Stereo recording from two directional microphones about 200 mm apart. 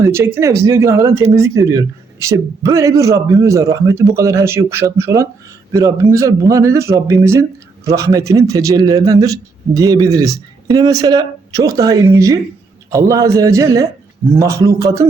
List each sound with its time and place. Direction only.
0.0 s speech: 15° right (ahead or behind)